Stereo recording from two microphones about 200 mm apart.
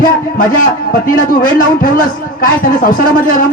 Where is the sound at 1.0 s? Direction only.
45° left (ahead or behind).